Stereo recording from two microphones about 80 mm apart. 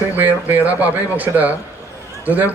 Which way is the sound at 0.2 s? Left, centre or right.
Right.